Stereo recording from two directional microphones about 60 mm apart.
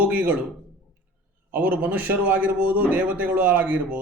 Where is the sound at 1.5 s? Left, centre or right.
Right.